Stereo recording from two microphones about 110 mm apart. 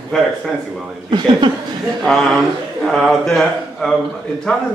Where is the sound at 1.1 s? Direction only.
40° right (ahead or behind).